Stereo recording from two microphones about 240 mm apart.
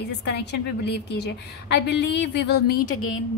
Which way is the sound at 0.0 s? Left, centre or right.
Left.